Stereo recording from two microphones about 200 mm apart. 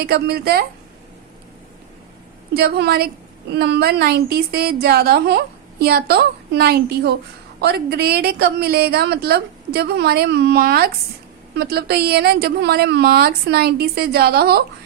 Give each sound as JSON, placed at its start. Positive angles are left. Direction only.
{"t": 0.0, "sound": "speech", "side_deg": -50}
{"t": 2.6, "sound": "speech", "side_deg": -55}